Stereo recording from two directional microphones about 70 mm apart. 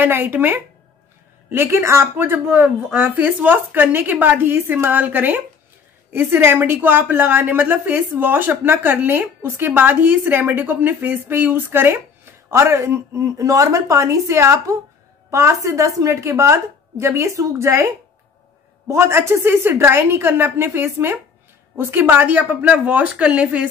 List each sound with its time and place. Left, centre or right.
0.0 s a woman's voice: right
12.4 s speech: right
18.9 s a woman's voice: right; by 23.7 s centre